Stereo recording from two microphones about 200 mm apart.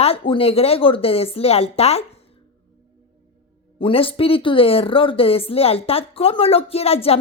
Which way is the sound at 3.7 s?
25° left (ahead or behind).